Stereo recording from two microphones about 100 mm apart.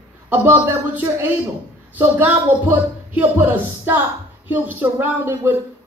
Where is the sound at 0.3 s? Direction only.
20° right (ahead or behind).